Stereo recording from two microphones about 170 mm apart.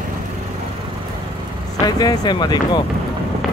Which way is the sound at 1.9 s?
25° left (ahead or behind).